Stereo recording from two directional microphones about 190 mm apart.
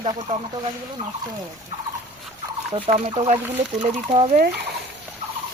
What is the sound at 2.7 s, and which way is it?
Speech, 30° right (ahead or behind).